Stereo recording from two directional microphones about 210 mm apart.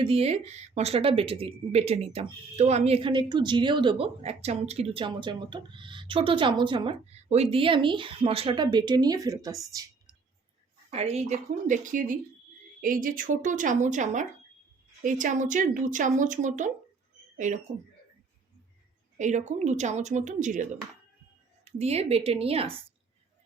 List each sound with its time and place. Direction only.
0.0 s speech: 30° right (ahead or behind)
10.9 s a woman's voice: 30° right (ahead or behind)
19.2 s a woman's voice: 35° right (ahead or behind)